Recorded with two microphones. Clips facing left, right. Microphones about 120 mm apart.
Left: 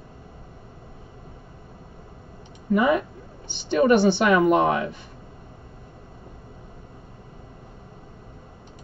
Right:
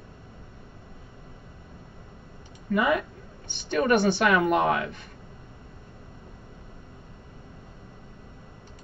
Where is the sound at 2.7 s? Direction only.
35° left (ahead or behind).